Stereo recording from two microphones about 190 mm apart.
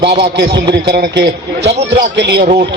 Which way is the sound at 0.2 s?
65° right (ahead or behind).